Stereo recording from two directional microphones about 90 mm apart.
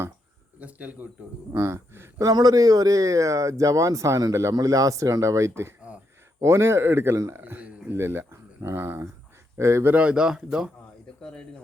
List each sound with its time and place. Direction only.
0.6 s speech: 20° right (ahead or behind)
1.5 s speech: 30° right (ahead or behind)
2.2 s a man's voice: 45° right (ahead or behind)
9.9 s speech: 15° right (ahead or behind)